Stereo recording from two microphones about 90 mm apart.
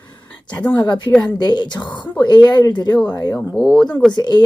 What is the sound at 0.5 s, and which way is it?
Speech, 15° left (ahead or behind).